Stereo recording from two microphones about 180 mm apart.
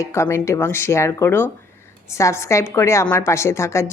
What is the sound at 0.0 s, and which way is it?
A woman's voice, 15° left (ahead or behind).